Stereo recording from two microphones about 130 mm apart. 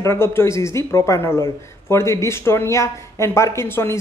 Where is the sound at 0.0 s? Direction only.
20° left (ahead or behind).